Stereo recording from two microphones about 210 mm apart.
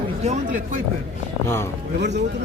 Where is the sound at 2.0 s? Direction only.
55° right (ahead or behind).